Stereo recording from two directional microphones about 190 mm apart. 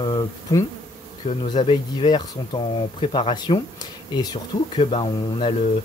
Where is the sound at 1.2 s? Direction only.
30° left (ahead or behind).